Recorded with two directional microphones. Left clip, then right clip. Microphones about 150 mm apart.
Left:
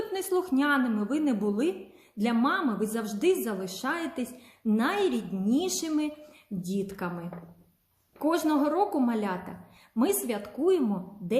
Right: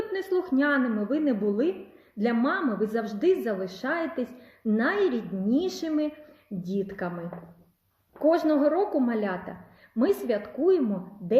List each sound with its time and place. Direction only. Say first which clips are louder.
0.1 s a woman's voice: right 1 dB; 20° left (ahead or behind)
8.3 s a woman's voice: right 4 dB; 20° left (ahead or behind)